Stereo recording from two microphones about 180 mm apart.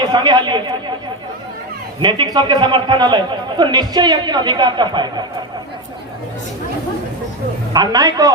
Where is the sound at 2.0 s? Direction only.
25° right (ahead or behind).